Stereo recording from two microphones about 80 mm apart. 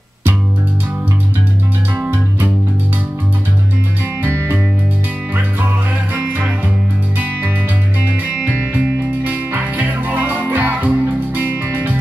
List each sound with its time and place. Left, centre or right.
2.0 s music: right
4.2 s music: right
6.1 s music: centre
8.1 s music: centre